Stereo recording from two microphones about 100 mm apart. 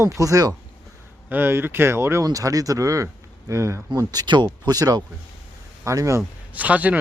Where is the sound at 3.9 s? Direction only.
40° right (ahead or behind).